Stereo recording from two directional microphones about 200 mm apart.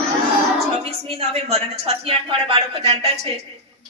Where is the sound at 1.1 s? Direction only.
30° right (ahead or behind).